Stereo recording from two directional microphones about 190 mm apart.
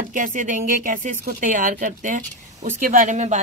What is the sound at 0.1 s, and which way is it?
A woman's voice, 45° right (ahead or behind).